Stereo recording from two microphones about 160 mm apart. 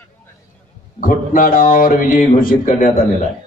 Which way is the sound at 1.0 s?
60° left (ahead or behind).